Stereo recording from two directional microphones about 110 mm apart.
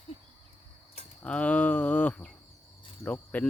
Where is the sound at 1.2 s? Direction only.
10° left (ahead or behind).